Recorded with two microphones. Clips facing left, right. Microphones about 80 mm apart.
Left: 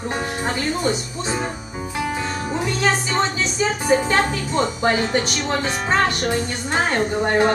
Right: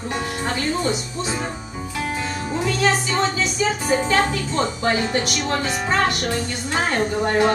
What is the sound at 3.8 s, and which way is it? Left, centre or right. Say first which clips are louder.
Speech: left 2 dB; centre.